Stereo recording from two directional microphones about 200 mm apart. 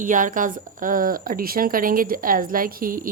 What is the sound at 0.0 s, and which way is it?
Speech, 40° right (ahead or behind).